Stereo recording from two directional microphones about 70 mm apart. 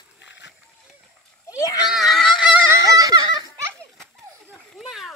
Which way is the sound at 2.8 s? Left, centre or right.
Right.